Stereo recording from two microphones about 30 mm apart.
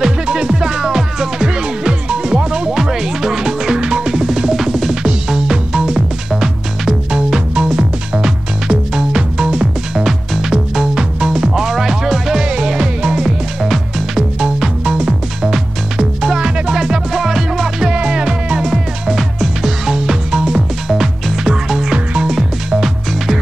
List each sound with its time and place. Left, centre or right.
0.0 s music: right
2.7 s music: centre
4.6 s music: centre
5.9 s music: centre
7.5 s music: right; by 14.2 s centre
14.4 s music: right
16.4 s music: right
17.9 s music: right
18.7 s music: centre
20.0 s music: right
20.9 s music: centre